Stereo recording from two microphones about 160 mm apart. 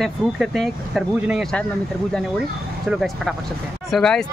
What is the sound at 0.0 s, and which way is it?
Speech, centre (ahead or behind).